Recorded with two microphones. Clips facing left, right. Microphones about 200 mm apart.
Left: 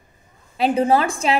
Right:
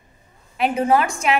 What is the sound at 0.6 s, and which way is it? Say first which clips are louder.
Speech: left 1 dB; 30° left (ahead or behind).